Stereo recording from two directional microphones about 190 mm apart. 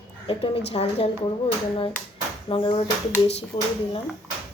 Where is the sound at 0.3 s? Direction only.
30° left (ahead or behind).